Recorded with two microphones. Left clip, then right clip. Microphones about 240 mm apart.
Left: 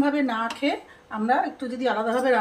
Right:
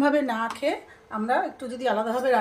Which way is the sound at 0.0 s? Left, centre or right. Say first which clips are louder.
Right 1 dB; right.